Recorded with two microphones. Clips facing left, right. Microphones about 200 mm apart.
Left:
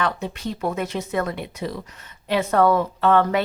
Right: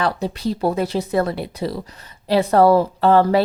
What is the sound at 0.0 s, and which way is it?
A woman's voice, 35° right (ahead or behind).